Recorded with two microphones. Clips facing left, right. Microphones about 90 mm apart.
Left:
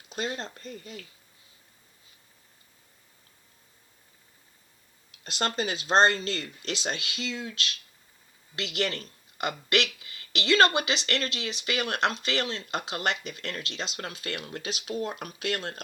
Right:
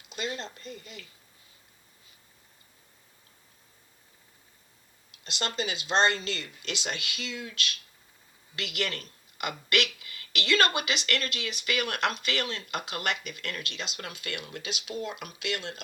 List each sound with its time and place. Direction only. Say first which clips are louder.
0.1 s speech: left 2 dB; 40° left (ahead or behind)
5.2 s speech: left 3 dB; 40° left (ahead or behind)